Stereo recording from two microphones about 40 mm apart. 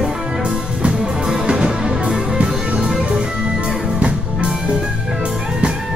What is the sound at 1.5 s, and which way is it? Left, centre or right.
Music, centre.